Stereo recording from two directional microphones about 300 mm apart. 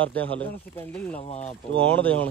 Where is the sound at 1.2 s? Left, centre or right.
Left.